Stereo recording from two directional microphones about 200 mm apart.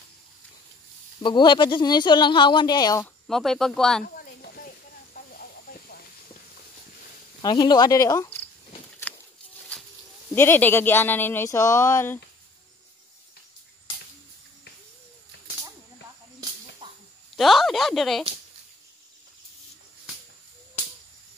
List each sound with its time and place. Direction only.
1.2 s speech: 25° left (ahead or behind)
3.3 s speech: centre (ahead or behind)
4.0 s a sound: 45° left (ahead or behind)
5.1 s hiss: 45° left (ahead or behind)
7.4 s speech: 20° left (ahead or behind)
9.1 s a sound: 5° left (ahead or behind)
10.3 s speech: 10° left (ahead or behind)
16.8 s a sound: 25° right (ahead or behind)
17.4 s speech: centre (ahead or behind)